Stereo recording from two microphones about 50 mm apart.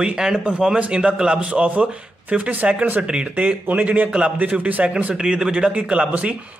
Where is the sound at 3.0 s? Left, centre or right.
Right.